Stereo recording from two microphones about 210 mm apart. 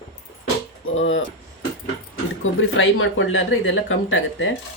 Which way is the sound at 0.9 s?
65° left (ahead or behind).